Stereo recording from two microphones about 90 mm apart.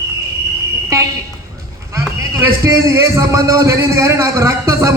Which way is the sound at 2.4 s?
30° right (ahead or behind).